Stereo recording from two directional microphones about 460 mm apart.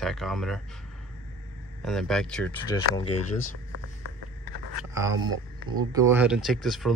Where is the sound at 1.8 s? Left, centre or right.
Centre.